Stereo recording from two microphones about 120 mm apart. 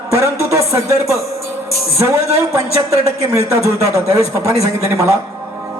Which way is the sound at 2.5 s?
25° right (ahead or behind).